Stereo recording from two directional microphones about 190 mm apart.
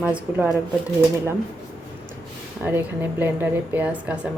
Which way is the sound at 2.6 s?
10° right (ahead or behind).